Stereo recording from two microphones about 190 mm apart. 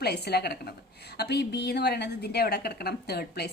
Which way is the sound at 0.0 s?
60° left (ahead or behind).